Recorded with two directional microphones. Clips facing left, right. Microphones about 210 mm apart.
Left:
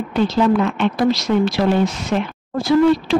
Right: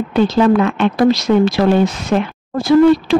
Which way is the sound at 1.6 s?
70° right (ahead or behind).